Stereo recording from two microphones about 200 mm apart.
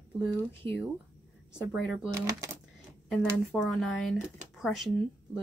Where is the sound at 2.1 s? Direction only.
15° right (ahead or behind).